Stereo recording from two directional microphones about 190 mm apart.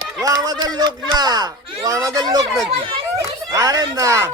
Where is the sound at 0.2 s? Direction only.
20° right (ahead or behind).